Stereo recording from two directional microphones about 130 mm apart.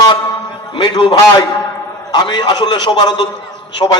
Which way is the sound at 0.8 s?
35° left (ahead or behind).